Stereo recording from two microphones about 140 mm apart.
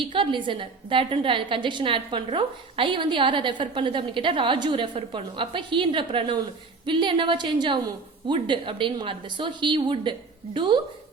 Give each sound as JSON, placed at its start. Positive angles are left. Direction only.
{"t": 0.0, "sound": "a woman's voice", "side_deg": -35}